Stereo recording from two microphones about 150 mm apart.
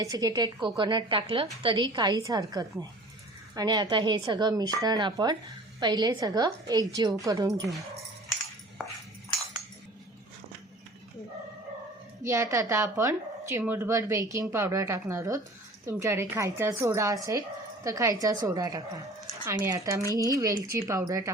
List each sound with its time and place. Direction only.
0.0 s a woman's voice: 25° right (ahead or behind)
12.2 s a woman's voice: 20° right (ahead or behind)